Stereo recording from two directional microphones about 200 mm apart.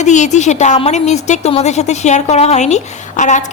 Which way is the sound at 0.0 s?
35° left (ahead or behind).